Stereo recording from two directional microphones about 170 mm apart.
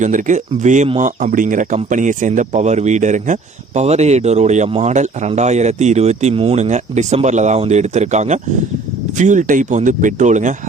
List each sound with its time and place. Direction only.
0.0 s speech: 50° right (ahead or behind)